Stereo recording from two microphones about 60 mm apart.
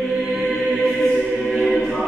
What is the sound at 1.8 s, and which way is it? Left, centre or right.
A capella, centre.